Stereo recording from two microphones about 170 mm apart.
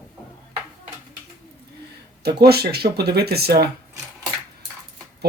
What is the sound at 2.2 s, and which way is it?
Speech, 70° right (ahead or behind).